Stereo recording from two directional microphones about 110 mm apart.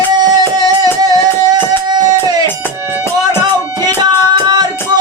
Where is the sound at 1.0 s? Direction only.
35° right (ahead or behind).